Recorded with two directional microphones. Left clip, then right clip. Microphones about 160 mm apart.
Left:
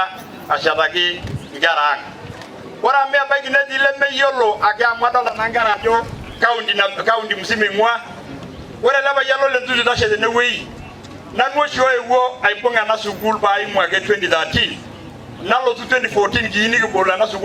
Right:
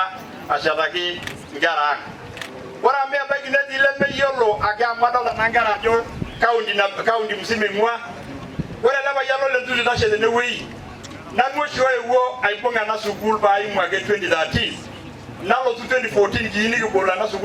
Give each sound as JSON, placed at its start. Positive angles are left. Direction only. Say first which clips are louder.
{"t": 0.5, "sound": "a man's voice", "louder": "left 4 dB", "side_deg": 25}
{"t": 5.4, "sound": "speech", "louder": "left 1 dB", "side_deg": 0}
{"t": 6.4, "sound": "a man's voice", "louder": "left 2 dB", "side_deg": 25}